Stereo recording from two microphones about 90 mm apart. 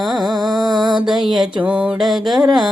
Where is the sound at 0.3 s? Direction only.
50° right (ahead or behind).